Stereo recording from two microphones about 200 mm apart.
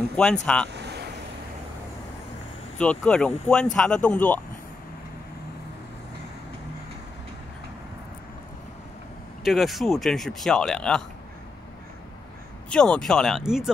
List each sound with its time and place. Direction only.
0.1 s speech: 5° left (ahead or behind)
0.7 s vehicle: 55° right (ahead or behind)
2.8 s speech: 5° left (ahead or behind)
9.4 s speech: centre (ahead or behind)
12.6 s speech: 5° left (ahead or behind)